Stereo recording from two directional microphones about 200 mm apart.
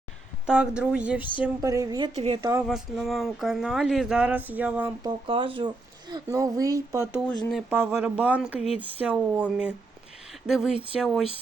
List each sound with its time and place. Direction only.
0.4 s speech: 5° right (ahead or behind)
2.1 s a woman's voice: 30° right (ahead or behind)
2.4 s speech: 15° right (ahead or behind)
2.6 s speech: centre (ahead or behind)
5.0 s speech: 25° right (ahead or behind); by 11.3 s centre (ahead or behind)